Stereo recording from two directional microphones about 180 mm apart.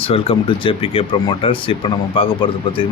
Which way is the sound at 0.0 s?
30° left (ahead or behind).